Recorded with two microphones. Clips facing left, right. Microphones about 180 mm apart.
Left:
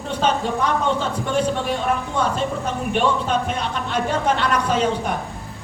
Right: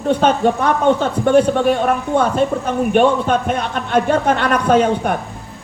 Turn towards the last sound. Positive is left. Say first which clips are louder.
# right 6 dB
turn(degrees=-55)  # may be behind; listen again after turning